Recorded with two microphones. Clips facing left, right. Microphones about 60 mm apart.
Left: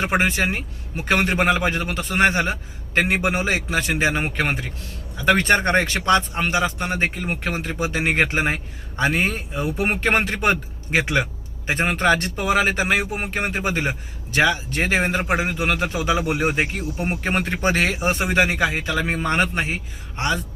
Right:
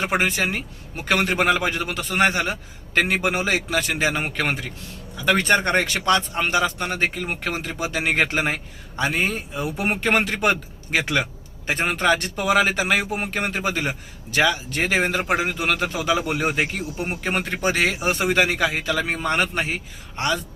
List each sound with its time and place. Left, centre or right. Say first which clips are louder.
0.0 s a man's voice: left 1 dB; left